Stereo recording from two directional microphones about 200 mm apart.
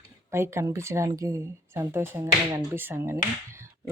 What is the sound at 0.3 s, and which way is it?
Speech, 15° right (ahead or behind).